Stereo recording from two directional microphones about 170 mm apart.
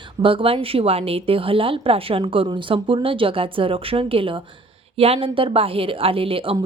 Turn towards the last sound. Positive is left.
turn(degrees=-30)  # may be behind; listen again after turning